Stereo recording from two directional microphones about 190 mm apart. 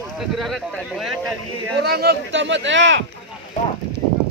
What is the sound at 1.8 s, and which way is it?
Speech, 60° right (ahead or behind).